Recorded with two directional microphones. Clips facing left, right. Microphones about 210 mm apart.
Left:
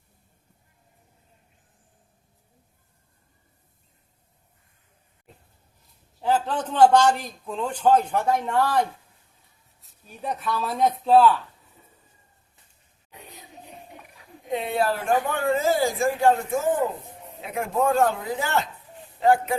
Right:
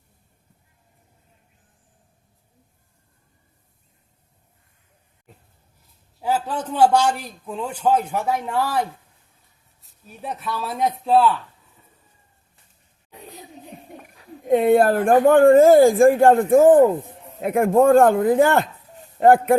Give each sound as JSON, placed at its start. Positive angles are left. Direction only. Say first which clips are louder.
{"t": 6.2, "sound": "a man's voice", "louder": "even", "side_deg": -10}
{"t": 14.4, "sound": "speech", "louder": "right 10 dB", "side_deg": -50}